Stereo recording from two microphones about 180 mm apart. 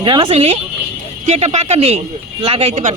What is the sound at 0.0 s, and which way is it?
A woman's voice, 30° right (ahead or behind).